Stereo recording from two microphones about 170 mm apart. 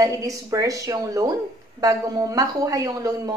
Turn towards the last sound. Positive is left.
turn(degrees=-20)  # may be behind; listen again after turning